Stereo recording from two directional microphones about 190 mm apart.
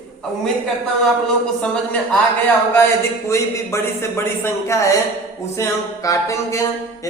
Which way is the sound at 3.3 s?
15° left (ahead or behind).